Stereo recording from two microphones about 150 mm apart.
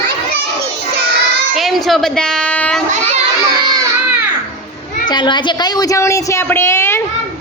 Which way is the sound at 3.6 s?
25° right (ahead or behind).